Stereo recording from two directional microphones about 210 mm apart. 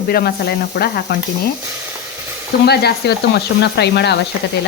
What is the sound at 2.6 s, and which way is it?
Speech, 50° left (ahead or behind).